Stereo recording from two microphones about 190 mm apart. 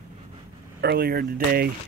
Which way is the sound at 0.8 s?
55° right (ahead or behind).